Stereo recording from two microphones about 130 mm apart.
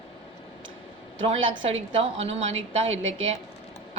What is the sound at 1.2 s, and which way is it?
A woman's voice, 50° right (ahead or behind).